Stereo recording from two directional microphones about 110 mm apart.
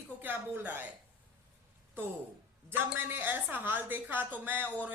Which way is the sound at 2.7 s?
20° right (ahead or behind).